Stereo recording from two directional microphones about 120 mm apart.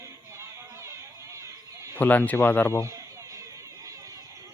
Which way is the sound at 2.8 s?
25° right (ahead or behind).